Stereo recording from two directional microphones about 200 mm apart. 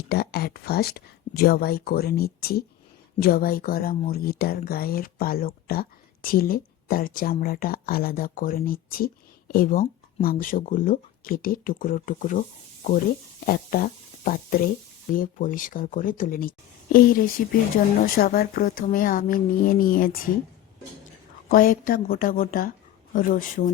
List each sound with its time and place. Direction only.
0.1 s speech: 50° left (ahead or behind)
21.5 s speech: 45° left (ahead or behind)